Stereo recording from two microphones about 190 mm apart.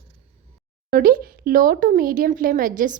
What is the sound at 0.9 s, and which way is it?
Speech, 50° right (ahead or behind).